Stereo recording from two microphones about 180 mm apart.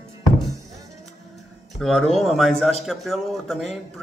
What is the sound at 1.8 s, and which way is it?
A man's voice, centre (ahead or behind).